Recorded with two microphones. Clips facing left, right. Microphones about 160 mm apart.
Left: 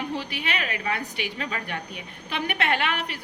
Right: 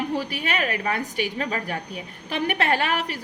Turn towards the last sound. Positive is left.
turn(degrees=-40)  # may be behind; listen again after turning